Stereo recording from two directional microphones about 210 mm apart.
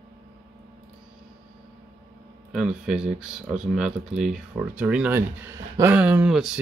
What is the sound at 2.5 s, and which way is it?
Speech, 5° right (ahead or behind).